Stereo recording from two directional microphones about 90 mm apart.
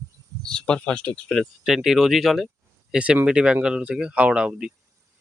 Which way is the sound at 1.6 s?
5° right (ahead or behind).